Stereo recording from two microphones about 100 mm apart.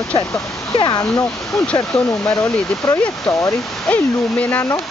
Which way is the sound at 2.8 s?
15° left (ahead or behind).